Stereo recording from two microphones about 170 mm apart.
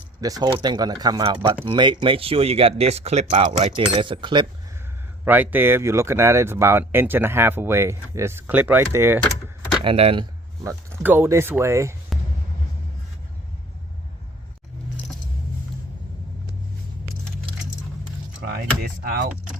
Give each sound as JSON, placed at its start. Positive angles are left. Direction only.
{"t": 0.2, "sound": "speech", "side_deg": -20}
{"t": 3.8, "sound": "speech", "side_deg": -30}
{"t": 5.2, "sound": "speech", "side_deg": -10}
{"t": 9.8, "sound": "speech", "side_deg": -35}
{"t": 10.6, "sound": "speech", "side_deg": -15}
{"t": 18.8, "sound": "speech", "side_deg": -60}